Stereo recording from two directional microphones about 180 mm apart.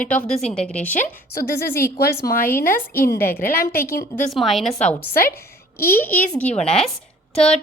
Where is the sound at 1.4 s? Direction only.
60° left (ahead or behind).